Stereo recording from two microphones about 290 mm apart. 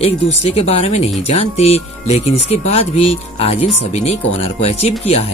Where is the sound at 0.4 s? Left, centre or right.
Left.